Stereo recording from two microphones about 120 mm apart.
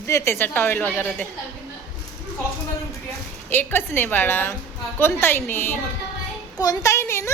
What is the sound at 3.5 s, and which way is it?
A woman's voice, 15° left (ahead or behind).